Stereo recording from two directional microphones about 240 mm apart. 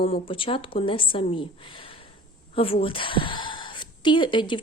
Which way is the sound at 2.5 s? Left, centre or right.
Left.